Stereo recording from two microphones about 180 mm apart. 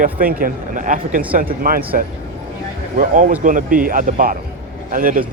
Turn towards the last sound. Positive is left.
turn(degrees=-50)  # may be behind; listen again after turning